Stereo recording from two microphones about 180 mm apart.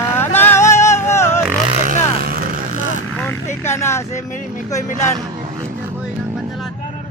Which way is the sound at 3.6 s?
15° left (ahead or behind).